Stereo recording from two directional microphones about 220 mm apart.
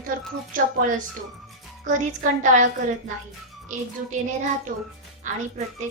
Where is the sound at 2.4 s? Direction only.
35° right (ahead or behind).